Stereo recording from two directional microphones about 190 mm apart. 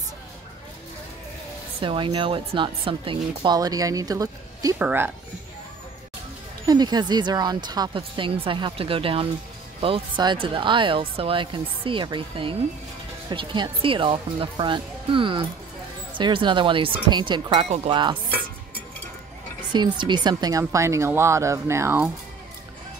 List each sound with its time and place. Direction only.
1.8 s speech: 25° right (ahead or behind)
6.7 s speech: 20° right (ahead or behind)
19.7 s speech: 25° right (ahead or behind)